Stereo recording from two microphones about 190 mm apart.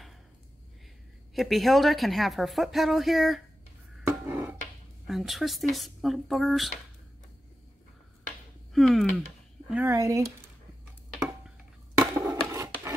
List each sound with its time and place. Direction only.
1.3 s speech: centre (ahead or behind)
4.3 s a sound: 10° right (ahead or behind)
5.0 s speech: centre (ahead or behind)
8.7 s speech: centre (ahead or behind)
9.7 s speech: 10° right (ahead or behind)
12.0 s a sound: 15° right (ahead or behind)